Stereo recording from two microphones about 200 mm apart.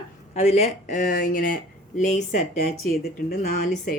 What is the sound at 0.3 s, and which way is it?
A woman's voice, 35° left (ahead or behind).